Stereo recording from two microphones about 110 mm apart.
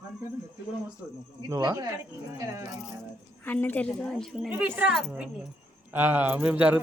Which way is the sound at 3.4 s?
15° left (ahead or behind).